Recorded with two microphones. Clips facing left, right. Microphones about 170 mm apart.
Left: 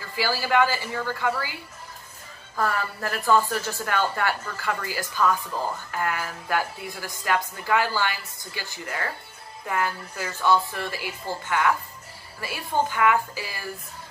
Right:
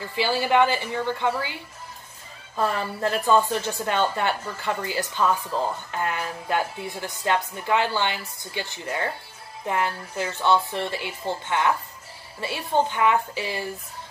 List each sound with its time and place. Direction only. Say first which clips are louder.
0.0 s a woman's voice: right 3 dB; 20° right (ahead or behind)
2.5 s a woman's voice: right 1 dB; 20° right (ahead or behind)